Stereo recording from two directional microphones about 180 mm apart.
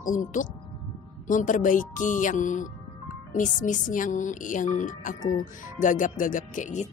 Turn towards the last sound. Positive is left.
turn(degrees=45)  # may be behind; listen again after turning